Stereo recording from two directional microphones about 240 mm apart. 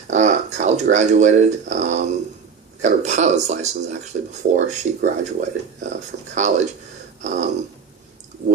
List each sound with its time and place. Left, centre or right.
0.1 s speech: right